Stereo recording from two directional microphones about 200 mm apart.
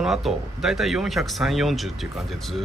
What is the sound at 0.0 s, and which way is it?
Speech, centre (ahead or behind).